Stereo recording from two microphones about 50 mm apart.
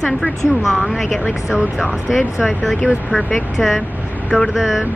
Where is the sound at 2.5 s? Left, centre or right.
Centre.